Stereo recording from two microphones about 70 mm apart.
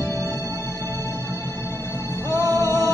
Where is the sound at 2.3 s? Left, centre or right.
Right.